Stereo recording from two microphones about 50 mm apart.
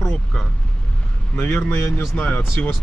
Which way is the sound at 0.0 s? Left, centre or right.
Centre.